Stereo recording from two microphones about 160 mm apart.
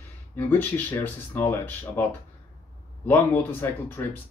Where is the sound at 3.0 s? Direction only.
15° left (ahead or behind).